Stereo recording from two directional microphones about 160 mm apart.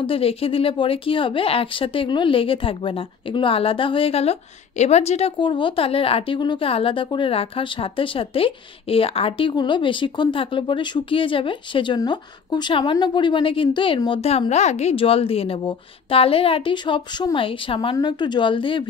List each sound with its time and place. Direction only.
0.0 s speech: 35° left (ahead or behind)